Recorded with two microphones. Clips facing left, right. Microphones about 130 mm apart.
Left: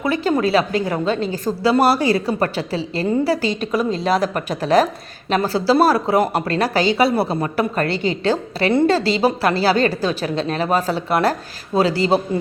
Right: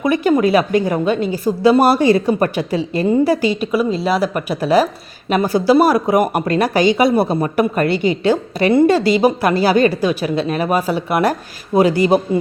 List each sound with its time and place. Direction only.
0.0 s speech: 15° right (ahead or behind)